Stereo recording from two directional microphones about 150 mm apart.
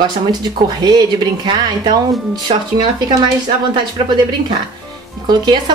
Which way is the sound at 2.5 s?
40° right (ahead or behind).